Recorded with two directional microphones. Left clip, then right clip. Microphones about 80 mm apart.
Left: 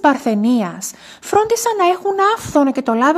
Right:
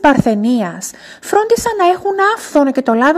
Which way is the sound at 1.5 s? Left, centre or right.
Centre.